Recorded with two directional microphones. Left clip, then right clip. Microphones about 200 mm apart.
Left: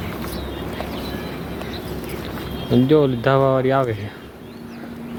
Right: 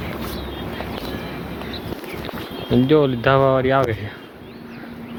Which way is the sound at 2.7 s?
5° left (ahead or behind).